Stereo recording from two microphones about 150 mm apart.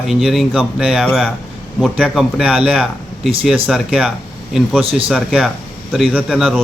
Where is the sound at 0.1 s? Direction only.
Centre (ahead or behind).